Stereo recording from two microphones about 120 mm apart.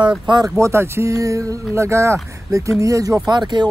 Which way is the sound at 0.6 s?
25° right (ahead or behind).